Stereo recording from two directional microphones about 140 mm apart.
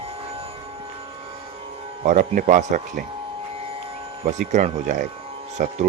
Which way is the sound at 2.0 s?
80° right.